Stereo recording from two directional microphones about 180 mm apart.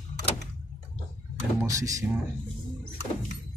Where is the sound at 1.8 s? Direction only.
20° right (ahead or behind).